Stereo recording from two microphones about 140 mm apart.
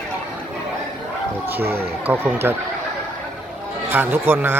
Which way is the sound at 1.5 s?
15° right (ahead or behind).